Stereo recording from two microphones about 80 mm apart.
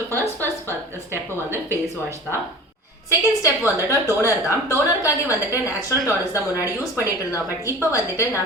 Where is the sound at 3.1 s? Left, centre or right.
Left.